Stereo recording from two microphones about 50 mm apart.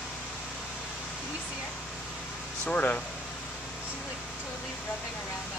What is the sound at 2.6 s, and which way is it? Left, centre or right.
Speech, left.